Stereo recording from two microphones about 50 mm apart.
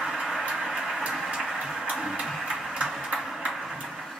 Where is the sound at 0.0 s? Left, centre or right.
Centre.